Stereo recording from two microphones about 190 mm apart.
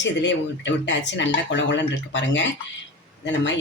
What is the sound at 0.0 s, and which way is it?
Speech, 70° left (ahead or behind).